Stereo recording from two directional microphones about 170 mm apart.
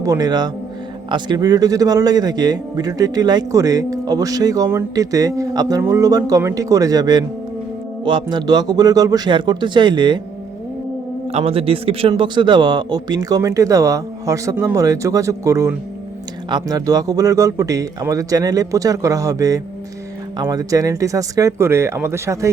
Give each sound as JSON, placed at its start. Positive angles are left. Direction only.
{"t": 0.0, "sound": "a man's voice", "side_deg": -20}
{"t": 11.3, "sound": "a man's voice", "side_deg": -35}